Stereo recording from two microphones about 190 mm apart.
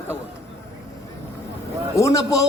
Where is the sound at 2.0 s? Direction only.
15° left (ahead or behind).